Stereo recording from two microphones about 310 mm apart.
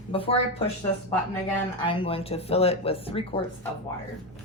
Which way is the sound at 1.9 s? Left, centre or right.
Centre.